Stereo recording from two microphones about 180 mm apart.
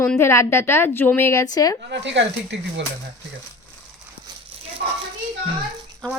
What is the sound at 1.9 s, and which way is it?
Speech, 80° right.